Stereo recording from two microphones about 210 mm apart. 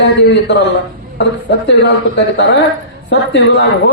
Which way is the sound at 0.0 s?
55° left (ahead or behind).